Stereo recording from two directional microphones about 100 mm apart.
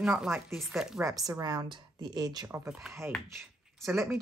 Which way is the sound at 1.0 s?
35° right (ahead or behind).